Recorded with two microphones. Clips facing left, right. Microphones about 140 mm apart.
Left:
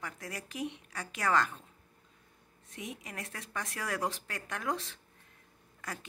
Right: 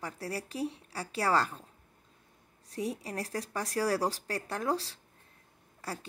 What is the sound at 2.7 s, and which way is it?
A woman's voice, 35° right (ahead or behind).